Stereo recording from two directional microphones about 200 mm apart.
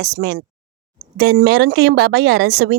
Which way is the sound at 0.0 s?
55° right (ahead or behind).